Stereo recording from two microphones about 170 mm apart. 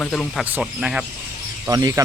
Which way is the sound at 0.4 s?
10° right (ahead or behind).